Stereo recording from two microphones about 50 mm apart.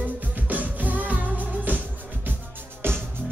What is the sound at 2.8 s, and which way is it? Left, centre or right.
Music, right.